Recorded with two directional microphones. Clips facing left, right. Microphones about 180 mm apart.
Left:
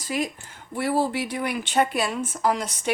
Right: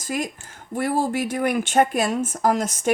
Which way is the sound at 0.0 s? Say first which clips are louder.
Even; 45° right (ahead or behind).